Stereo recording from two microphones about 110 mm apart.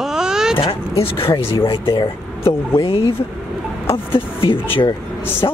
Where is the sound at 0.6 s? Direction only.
60° left (ahead or behind).